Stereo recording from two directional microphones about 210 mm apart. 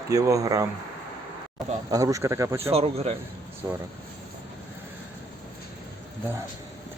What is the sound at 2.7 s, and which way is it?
Speech, 30° right (ahead or behind).